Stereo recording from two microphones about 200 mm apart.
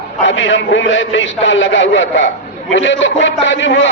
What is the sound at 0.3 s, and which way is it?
A man's voice, 65° left (ahead or behind).